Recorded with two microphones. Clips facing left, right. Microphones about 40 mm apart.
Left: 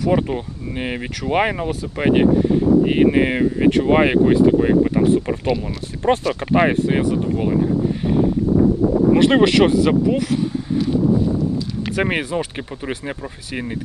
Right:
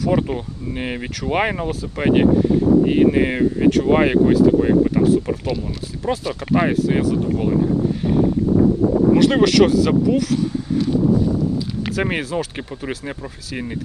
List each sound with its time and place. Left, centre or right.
0.0 s speech: centre
2.8 s speech: left
6.4 s speech: left
9.2 s speech: left
11.9 s speech: centre